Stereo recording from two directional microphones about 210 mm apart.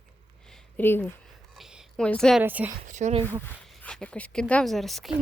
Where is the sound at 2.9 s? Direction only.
35° right (ahead or behind).